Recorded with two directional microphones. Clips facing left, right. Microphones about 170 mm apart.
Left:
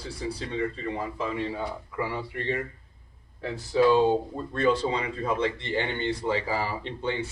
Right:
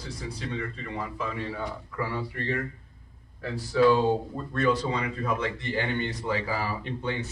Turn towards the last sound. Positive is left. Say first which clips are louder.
# left 1 dB
turn(degrees=25)  # may be behind; listen again after turning